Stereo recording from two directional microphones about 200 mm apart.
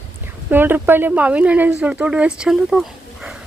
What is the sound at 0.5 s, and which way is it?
A woman's voice, 10° right (ahead or behind).